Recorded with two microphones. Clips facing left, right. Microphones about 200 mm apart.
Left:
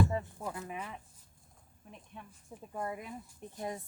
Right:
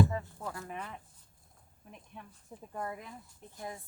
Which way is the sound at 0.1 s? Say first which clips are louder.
Left 2 dB; 15° left (ahead or behind).